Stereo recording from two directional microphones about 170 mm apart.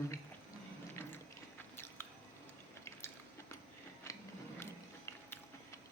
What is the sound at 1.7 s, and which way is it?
Squish, 15° left (ahead or behind).